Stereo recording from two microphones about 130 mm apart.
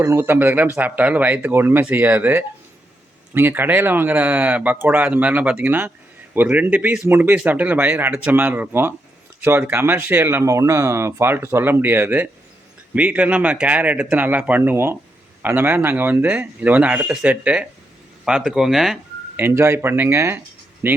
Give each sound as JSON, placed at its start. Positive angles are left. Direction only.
{"t": 0.0, "sound": "speech", "side_deg": -15}
{"t": 19.4, "sound": "speech", "side_deg": -20}